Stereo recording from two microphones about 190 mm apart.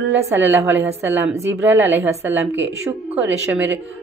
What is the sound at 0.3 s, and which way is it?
Speech, 10° right (ahead or behind).